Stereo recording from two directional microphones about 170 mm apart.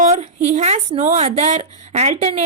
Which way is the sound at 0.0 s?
40° right (ahead or behind).